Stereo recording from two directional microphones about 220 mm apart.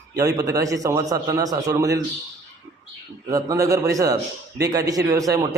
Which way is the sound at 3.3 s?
15° right (ahead or behind).